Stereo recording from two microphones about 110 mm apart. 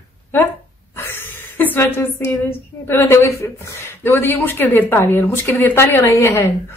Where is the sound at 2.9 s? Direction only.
25° left (ahead or behind).